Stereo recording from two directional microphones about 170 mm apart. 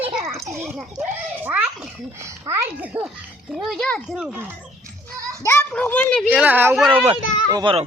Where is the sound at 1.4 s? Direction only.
10° right (ahead or behind).